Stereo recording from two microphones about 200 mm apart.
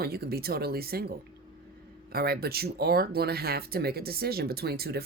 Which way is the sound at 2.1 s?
50° right (ahead or behind).